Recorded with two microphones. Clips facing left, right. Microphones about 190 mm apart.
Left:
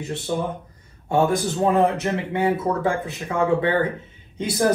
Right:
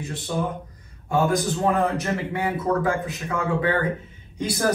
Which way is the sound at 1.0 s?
25° left (ahead or behind).